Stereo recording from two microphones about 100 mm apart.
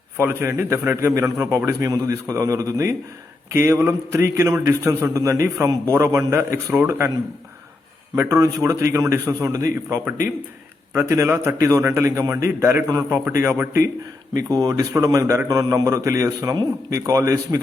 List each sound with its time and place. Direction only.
0.2 s a man's voice: 25° right (ahead or behind)
8.1 s a man's voice: 25° right (ahead or behind)
14.5 s a man's voice: 35° right (ahead or behind)